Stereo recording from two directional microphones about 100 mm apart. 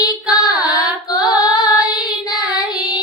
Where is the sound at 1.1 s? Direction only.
40° left (ahead or behind).